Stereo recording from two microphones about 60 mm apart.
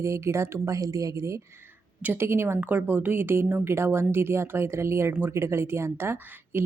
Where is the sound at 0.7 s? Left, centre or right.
Right.